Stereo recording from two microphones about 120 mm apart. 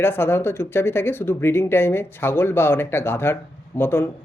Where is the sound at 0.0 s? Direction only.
20° left (ahead or behind).